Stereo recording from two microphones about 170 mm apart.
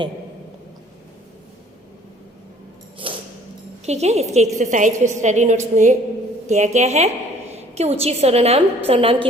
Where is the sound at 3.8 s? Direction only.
40° right (ahead or behind).